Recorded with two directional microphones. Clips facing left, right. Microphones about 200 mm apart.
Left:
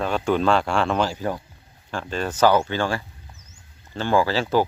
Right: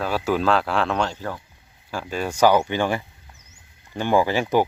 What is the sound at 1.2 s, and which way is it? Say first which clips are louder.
Speech: left 4 dB; 15° left (ahead or behind).